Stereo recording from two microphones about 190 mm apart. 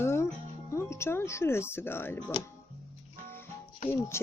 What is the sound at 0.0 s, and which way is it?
Music, 15° left (ahead or behind).